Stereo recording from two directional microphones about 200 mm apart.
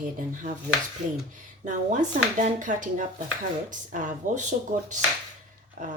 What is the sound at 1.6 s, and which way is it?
Speech, 40° right (ahead or behind).